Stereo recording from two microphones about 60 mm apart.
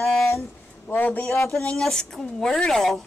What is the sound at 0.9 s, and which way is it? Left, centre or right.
Speech, left.